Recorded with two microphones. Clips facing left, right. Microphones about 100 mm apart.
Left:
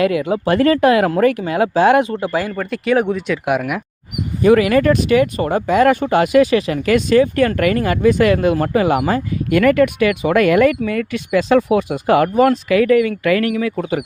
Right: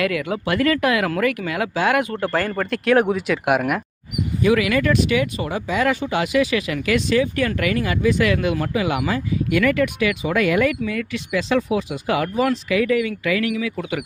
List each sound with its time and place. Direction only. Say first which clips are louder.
0.0 s speech: left 6 dB; 30° left (ahead or behind)
2.2 s speech: left 2 dB; 5° left (ahead or behind)
4.4 s speech: left 6 dB; 40° left (ahead or behind)